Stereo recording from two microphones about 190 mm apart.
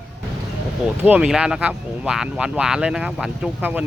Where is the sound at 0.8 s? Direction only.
5° right (ahead or behind).